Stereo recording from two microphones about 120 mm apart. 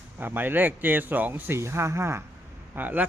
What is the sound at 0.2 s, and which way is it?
Speech, 15° right (ahead or behind).